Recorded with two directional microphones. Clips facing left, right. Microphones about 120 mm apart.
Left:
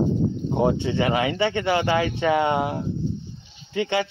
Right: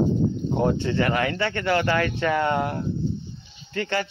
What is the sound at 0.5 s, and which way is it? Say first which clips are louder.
Speech: left 2 dB; 15° left (ahead or behind).